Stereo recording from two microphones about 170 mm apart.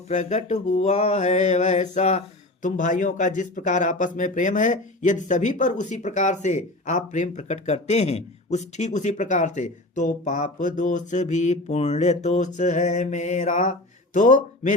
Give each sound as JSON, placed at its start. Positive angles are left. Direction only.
{"t": 0.1, "sound": "mantra", "side_deg": 45}